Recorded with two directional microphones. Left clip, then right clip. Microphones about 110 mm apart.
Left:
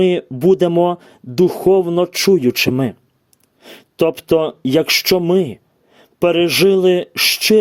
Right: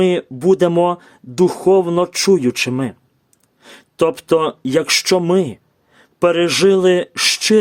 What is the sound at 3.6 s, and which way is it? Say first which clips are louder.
Speech: even; 20° left (ahead or behind).